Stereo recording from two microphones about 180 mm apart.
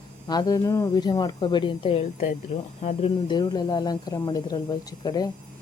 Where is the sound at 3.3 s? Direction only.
25° left (ahead or behind).